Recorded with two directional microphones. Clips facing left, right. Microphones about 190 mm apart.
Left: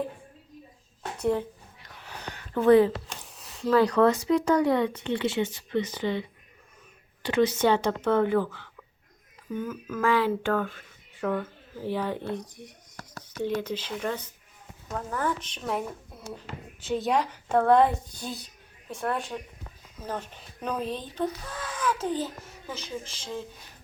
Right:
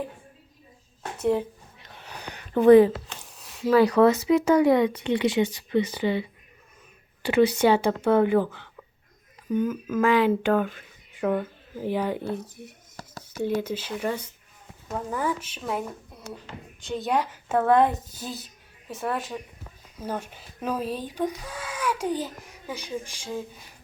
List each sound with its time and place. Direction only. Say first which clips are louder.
1.2 s speech: right 2 dB; 10° right (ahead or behind)
1.8 s a sound: even; 25° right (ahead or behind)
3.2 s speech: right 2 dB; centre (ahead or behind)